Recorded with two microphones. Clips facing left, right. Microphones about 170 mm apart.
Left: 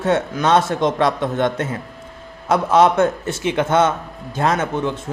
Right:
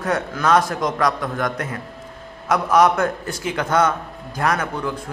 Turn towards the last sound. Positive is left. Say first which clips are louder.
# left 4 dB
turn(degrees=25)  # may be behind; listen again after turning